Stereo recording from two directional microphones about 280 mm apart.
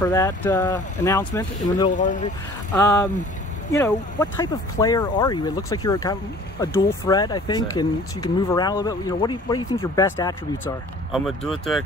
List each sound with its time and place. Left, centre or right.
0.0 s speech: centre
2.0 s speech: left
2.7 s speech: centre